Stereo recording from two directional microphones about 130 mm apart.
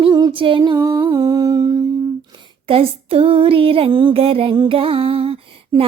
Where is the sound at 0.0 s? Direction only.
35° right (ahead or behind).